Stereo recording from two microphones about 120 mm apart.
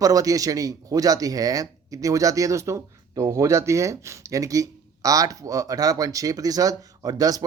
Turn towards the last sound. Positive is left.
turn(degrees=-30)  # may be behind; listen again after turning